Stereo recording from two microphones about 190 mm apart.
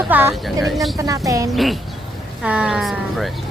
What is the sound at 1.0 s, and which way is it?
Speech, 15° right (ahead or behind).